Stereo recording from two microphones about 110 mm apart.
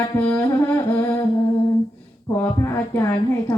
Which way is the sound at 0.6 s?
25° left (ahead or behind).